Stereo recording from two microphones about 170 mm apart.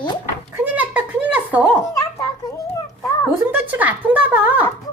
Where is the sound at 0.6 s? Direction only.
10° right (ahead or behind).